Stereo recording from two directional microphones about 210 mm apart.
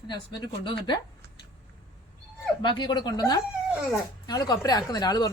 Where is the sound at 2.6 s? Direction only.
20° left (ahead or behind).